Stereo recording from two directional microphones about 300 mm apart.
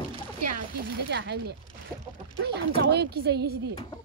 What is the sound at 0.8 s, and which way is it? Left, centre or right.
Speech, right.